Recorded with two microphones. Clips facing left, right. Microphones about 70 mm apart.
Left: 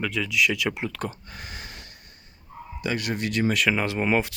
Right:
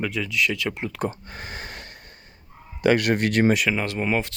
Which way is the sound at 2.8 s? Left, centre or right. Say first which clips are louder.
Right 8 dB; right.